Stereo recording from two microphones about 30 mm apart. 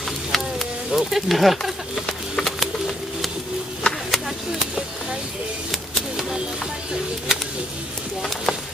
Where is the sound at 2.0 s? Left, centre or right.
Centre.